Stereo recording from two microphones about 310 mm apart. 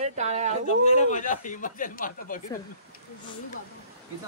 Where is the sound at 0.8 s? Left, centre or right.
Left.